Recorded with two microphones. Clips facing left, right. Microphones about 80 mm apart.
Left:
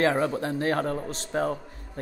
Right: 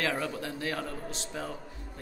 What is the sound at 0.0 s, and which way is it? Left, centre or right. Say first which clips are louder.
A man's voice: left 8 dB; left.